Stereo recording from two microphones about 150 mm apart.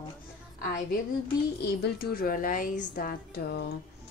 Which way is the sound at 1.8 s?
90° left.